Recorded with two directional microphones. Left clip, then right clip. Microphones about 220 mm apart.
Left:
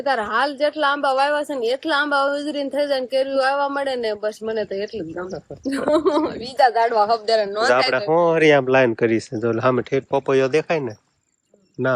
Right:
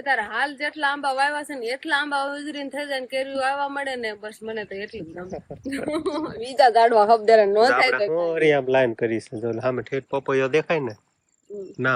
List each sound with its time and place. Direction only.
0.0 s a woman's voice: 20° left (ahead or behind)
6.6 s speech: 85° right
7.3 s speech: 35° right (ahead or behind)
7.7 s speech: 10° left (ahead or behind)